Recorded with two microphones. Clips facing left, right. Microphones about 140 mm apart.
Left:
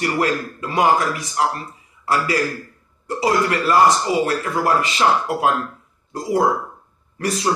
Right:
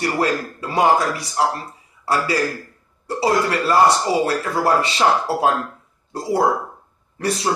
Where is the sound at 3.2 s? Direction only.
30° right (ahead or behind).